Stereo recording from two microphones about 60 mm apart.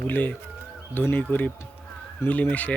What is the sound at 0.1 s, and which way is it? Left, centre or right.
Speech, left.